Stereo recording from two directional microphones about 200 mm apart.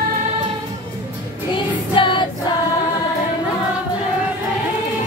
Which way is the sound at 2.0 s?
25° left (ahead or behind).